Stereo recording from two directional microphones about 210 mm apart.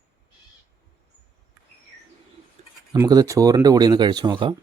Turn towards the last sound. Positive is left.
turn(degrees=-20)  # may be behind; listen again after turning